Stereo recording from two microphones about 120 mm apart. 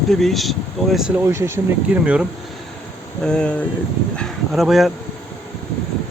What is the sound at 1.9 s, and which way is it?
Speech, 10° right (ahead or behind).